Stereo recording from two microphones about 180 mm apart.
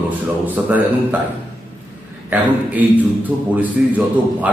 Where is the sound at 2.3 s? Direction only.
10° right (ahead or behind).